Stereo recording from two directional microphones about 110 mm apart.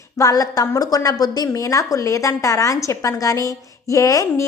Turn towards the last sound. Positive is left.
turn(degrees=30)  # may be behind; listen again after turning